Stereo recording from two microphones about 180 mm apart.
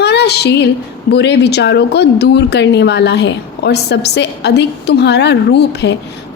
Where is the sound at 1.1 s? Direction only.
65° left (ahead or behind).